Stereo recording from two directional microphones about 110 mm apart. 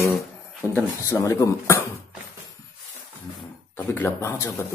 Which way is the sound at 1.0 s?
30° left (ahead or behind).